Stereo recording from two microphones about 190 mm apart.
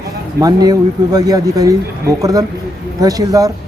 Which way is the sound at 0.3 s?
20° right (ahead or behind).